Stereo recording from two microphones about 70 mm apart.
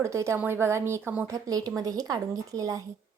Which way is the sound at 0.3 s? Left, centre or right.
Right.